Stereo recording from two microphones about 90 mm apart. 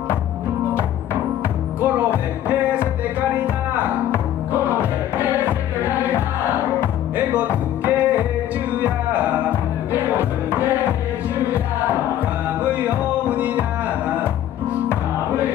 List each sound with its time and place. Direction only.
7.2 s music: 15° right (ahead or behind)
12.8 s music: 15° right (ahead or behind)